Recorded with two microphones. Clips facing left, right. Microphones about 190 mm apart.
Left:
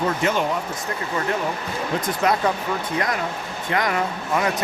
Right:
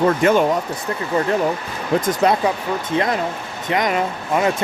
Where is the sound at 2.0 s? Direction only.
45° right (ahead or behind).